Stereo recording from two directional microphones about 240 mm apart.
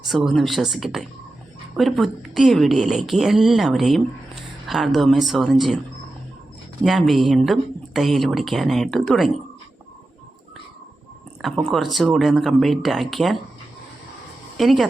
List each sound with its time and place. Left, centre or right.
0.1 s speech: centre
6.8 s speech: centre
11.4 s speech: centre
14.6 s speech: centre